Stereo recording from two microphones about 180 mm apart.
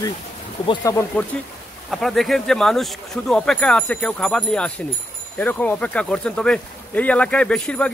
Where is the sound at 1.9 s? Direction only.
Centre (ahead or behind).